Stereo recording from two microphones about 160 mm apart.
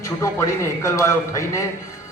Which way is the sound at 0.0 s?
20° left (ahead or behind).